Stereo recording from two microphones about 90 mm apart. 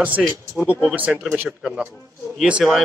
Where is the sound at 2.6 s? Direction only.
Centre (ahead or behind).